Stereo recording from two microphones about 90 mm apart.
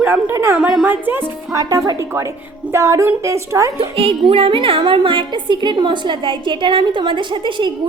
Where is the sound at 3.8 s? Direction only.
90° right.